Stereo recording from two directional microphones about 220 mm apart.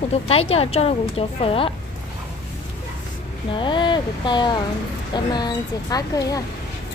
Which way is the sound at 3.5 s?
20° left (ahead or behind).